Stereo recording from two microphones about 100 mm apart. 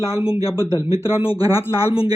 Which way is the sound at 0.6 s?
30° left (ahead or behind).